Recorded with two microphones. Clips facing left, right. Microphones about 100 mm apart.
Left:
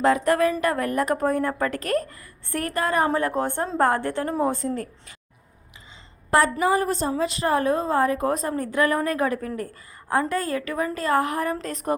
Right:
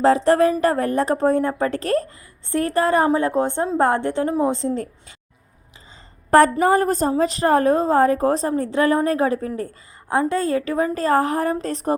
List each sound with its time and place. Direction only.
0.0 s a woman's voice: 30° right (ahead or behind)
6.3 s a woman's voice: 45° right (ahead or behind)